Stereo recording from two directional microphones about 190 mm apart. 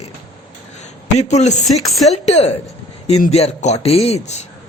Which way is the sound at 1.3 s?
35° left (ahead or behind).